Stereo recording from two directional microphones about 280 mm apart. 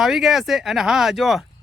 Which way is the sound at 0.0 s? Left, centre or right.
Centre.